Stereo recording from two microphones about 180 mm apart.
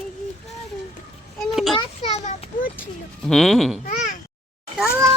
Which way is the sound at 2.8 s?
Centre (ahead or behind).